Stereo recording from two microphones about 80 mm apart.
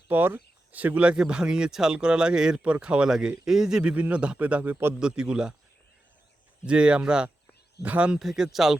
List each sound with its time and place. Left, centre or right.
0.1 s a man's voice: right
4.9 s speech: centre
6.7 s speech: centre
8.2 s speech: centre